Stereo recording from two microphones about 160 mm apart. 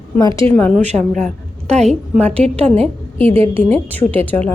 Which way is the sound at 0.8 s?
45° right (ahead or behind).